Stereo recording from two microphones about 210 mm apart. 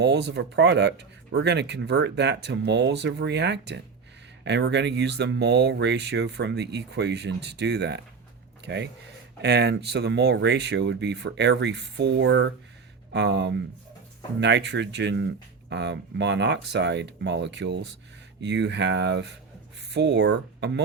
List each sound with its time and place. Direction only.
0.0 s speech: 55° right (ahead or behind)